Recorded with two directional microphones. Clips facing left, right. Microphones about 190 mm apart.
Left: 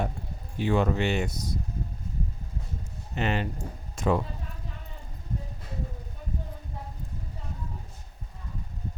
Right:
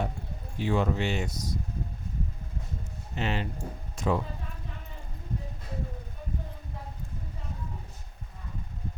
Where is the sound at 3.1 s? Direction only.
55° left (ahead or behind).